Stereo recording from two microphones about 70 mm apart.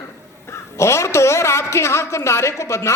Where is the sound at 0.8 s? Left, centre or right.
Left.